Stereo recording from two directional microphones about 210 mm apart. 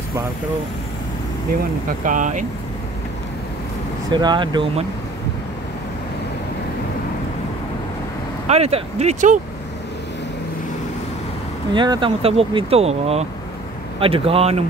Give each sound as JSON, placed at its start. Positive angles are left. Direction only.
{"t": 2.0, "sound": "speech", "side_deg": -35}
{"t": 4.1, "sound": "speech", "side_deg": -20}
{"t": 8.5, "sound": "speech", "side_deg": -30}
{"t": 11.7, "sound": "speech", "side_deg": -20}